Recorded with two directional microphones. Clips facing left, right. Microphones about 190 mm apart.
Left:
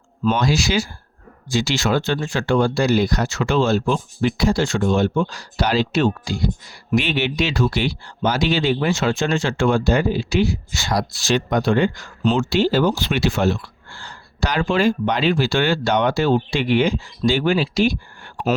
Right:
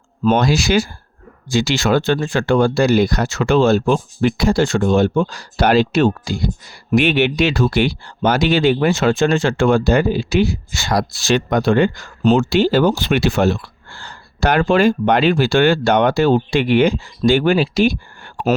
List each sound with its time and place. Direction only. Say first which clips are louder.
0.3 s speech: right 4 dB; 55° right (ahead or behind)
12.2 s speech: right 4 dB; 50° right (ahead or behind)